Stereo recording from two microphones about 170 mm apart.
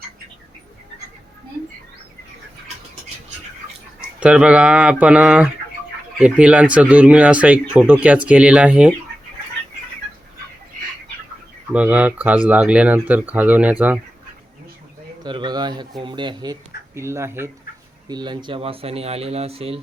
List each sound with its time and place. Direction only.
4.2 s speech: 5° right (ahead or behind)
11.7 s speech: 10° right (ahead or behind)
15.2 s speech: 25° right (ahead or behind)
18.1 s speech: 25° right (ahead or behind)